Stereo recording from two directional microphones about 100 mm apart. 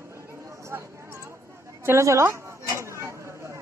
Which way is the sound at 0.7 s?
30° right (ahead or behind).